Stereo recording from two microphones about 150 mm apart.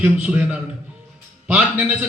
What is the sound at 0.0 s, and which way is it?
A man's voice, 10° right (ahead or behind).